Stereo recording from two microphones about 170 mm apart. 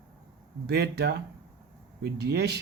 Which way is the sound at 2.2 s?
75° right (ahead or behind).